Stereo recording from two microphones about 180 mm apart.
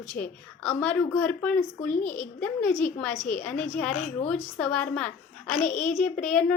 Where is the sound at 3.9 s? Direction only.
40° left (ahead or behind).